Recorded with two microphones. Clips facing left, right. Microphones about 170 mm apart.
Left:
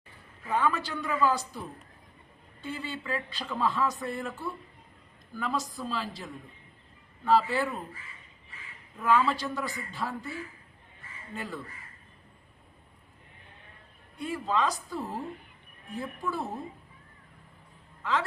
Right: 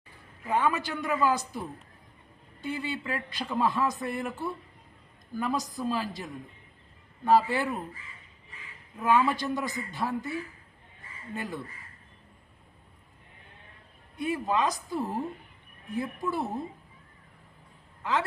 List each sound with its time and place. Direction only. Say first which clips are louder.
0.4 s speech: right 1 dB; 20° right (ahead or behind)
9.0 s speech: right 1 dB; 15° right (ahead or behind)
11.3 s speech: right 2 dB; 15° right (ahead or behind)
14.2 s a woman's voice: right 2 dB; 20° right (ahead or behind)
18.0 s speech: right 1 dB; 15° right (ahead or behind)